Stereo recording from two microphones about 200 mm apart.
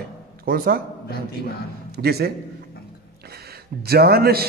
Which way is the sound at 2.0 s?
50° right (ahead or behind).